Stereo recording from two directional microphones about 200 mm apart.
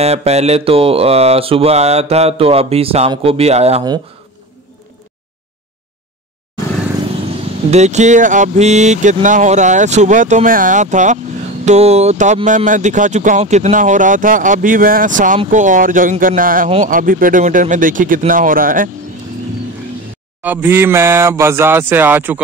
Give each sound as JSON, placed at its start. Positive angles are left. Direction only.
{"t": 0.0, "sound": "speech", "side_deg": -30}
{"t": 7.7, "sound": "speech", "side_deg": -35}
{"t": 20.4, "sound": "speech", "side_deg": -10}